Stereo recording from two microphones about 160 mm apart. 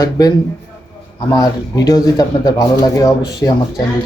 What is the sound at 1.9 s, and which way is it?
Speech, 20° left (ahead or behind).